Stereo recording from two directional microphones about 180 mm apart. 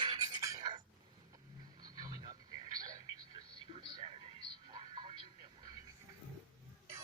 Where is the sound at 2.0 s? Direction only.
20° right (ahead or behind).